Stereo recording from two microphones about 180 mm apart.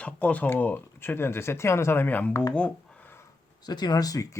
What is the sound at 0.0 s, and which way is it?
Speech, 10° left (ahead or behind).